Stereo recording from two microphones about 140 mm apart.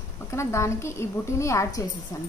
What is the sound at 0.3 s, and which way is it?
A woman's voice, 20° left (ahead or behind).